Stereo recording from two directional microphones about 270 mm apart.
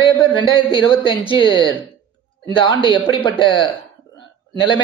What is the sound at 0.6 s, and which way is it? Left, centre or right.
A woman's voice, centre.